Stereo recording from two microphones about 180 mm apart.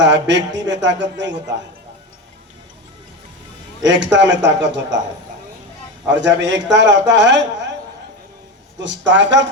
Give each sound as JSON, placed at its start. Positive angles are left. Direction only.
{"t": 0.0, "sound": "speech", "side_deg": -75}
{"t": 3.8, "sound": "a man's voice", "side_deg": -80}
{"t": 6.1, "sound": "a man's voice", "side_deg": -80}
{"t": 8.8, "sound": "a man's voice", "side_deg": -80}